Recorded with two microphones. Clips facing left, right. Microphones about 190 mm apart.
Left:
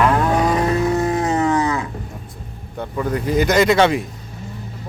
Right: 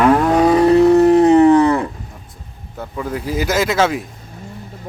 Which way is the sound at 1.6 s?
60° right (ahead or behind).